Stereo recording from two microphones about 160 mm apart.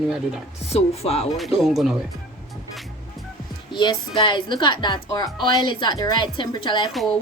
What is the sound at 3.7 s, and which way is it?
A woman's voice, 30° left (ahead or behind).